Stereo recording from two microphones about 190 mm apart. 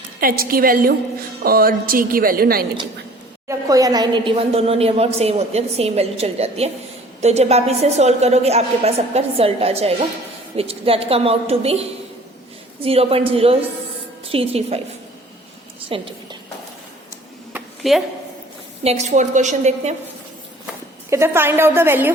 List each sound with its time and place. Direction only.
0.2 s a woman's voice: 50° right (ahead or behind)
3.5 s a woman's voice: 15° right (ahead or behind)
15.9 s a sound: 25° right (ahead or behind)
17.5 s a sound: centre (ahead or behind)
18.8 s a woman's voice: 35° right (ahead or behind)
21.1 s a woman's voice: 15° right (ahead or behind)